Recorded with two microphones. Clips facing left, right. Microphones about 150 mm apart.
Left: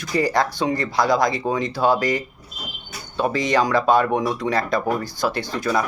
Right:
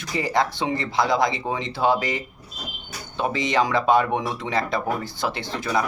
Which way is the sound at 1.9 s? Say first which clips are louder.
Left 4 dB; 45° left (ahead or behind).